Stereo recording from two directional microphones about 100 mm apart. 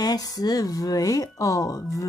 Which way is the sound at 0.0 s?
40° left (ahead or behind).